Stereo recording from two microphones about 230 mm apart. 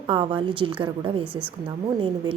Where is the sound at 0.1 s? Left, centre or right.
Right.